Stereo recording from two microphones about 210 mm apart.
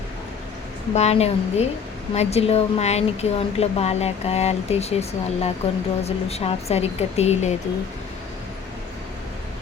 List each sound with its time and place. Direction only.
0.9 s speech: 30° left (ahead or behind)